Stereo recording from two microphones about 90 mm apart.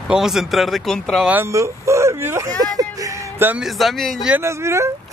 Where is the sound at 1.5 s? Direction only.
35° right (ahead or behind).